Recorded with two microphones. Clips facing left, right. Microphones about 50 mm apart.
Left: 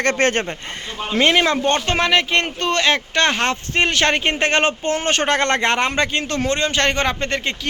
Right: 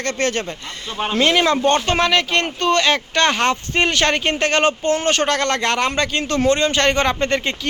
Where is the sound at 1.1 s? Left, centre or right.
Centre.